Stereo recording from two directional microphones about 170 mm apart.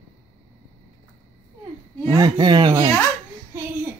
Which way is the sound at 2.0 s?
25° right (ahead or behind).